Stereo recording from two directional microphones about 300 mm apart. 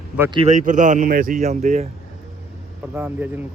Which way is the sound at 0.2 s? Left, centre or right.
Centre.